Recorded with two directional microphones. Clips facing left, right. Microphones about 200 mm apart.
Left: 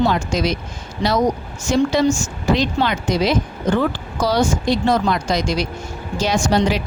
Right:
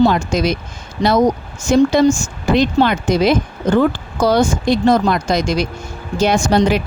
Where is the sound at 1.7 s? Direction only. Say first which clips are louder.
Right 5 dB; 50° right (ahead or behind).